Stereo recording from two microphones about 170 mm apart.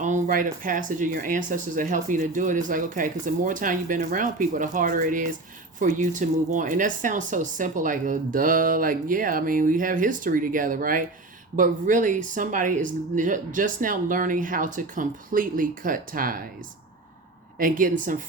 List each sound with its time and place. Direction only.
0.0 s speech: 50° right (ahead or behind)
17.6 s speech: 55° right (ahead or behind)